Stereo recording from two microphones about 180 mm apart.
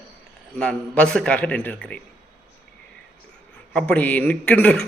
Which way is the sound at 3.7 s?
5° left (ahead or behind).